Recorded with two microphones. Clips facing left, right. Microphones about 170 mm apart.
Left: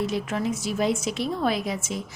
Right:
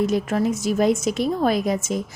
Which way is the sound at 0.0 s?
45° right (ahead or behind).